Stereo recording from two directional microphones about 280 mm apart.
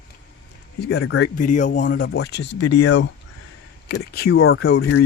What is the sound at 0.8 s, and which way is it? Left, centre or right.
Speech, left.